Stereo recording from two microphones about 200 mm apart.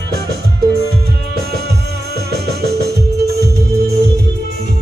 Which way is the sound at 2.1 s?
55° right (ahead or behind).